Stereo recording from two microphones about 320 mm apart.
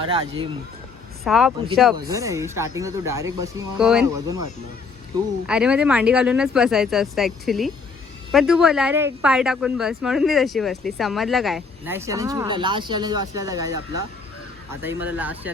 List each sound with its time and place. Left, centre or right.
0.0 s speech: centre
1.2 s speech: centre
5.5 s speech: centre
14.8 s speech: centre